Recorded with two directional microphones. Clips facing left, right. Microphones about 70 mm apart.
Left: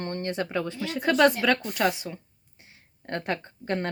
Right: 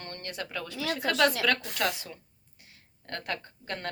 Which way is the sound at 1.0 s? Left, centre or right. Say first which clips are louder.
Left 6 dB; centre.